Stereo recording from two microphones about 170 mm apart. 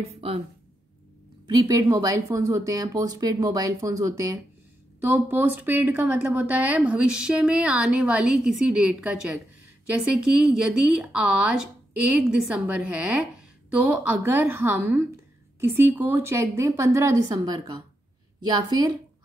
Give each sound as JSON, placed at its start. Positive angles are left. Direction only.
{"t": 0.0, "sound": "speech", "side_deg": -35}
{"t": 1.5, "sound": "a woman's voice", "side_deg": -20}